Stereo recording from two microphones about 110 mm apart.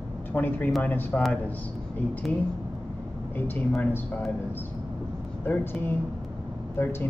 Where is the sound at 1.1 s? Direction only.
Centre (ahead or behind).